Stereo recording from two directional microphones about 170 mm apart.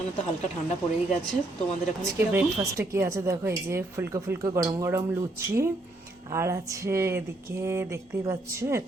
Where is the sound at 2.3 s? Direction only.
15° right (ahead or behind).